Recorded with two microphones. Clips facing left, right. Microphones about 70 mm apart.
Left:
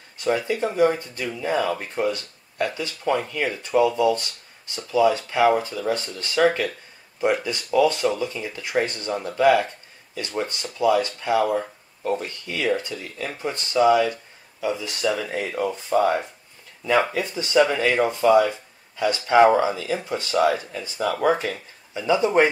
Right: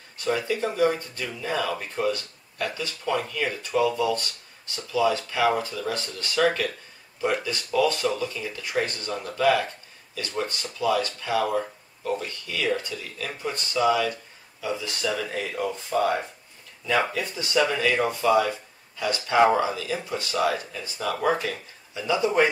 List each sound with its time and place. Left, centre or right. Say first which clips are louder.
0.2 s speech: left 3 dB; left